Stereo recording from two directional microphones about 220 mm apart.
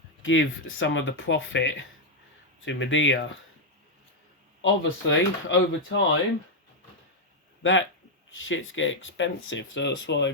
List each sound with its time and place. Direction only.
0.2 s speech: 60° left (ahead or behind)
4.6 s speech: 60° left (ahead or behind)
7.6 s speech: 60° left (ahead or behind)